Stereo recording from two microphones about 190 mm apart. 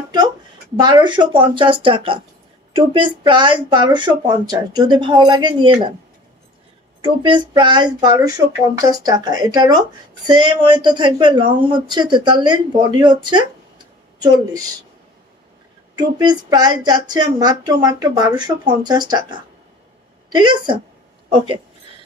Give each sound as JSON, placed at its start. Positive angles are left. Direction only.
{"t": 0.7, "sound": "speech", "side_deg": -25}
{"t": 7.0, "sound": "speech", "side_deg": -25}
{"t": 16.0, "sound": "speech", "side_deg": -20}
{"t": 20.2, "sound": "speech", "side_deg": -25}